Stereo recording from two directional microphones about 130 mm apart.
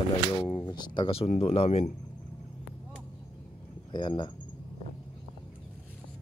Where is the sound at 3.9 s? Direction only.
35° left (ahead or behind).